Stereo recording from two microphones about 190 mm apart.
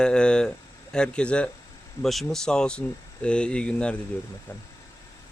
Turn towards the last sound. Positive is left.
turn(degrees=10)  # may be behind; listen again after turning